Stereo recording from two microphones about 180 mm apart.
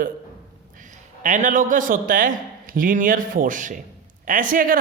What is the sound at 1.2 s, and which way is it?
A man's voice, 45° right (ahead or behind).